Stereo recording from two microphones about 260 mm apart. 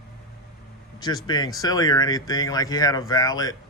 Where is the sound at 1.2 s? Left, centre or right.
Centre.